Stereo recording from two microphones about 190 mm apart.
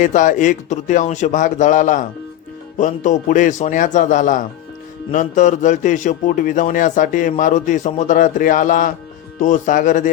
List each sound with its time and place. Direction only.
0.0 s a man's voice: 40° left (ahead or behind)